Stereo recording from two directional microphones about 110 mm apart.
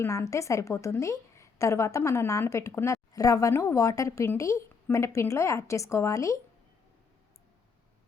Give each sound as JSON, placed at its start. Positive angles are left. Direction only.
{"t": 0.0, "sound": "a woman's voice", "side_deg": 25}